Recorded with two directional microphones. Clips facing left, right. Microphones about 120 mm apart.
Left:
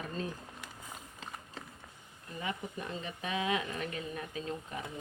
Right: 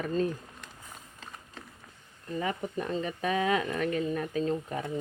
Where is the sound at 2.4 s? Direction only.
45° right (ahead or behind).